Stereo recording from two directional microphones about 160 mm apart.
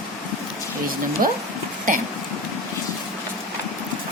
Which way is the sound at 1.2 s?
60° right (ahead or behind).